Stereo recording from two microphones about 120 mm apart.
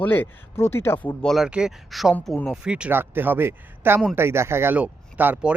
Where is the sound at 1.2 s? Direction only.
Centre (ahead or behind).